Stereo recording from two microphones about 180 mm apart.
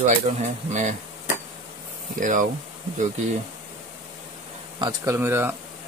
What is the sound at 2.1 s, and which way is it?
Speech, 45° right (ahead or behind).